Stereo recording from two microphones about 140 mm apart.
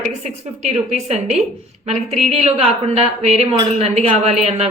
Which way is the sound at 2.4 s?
45° right (ahead or behind).